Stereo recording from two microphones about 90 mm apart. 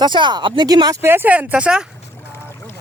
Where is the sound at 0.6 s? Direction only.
45° right (ahead or behind).